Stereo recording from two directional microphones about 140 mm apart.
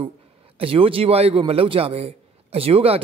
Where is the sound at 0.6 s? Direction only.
40° right (ahead or behind).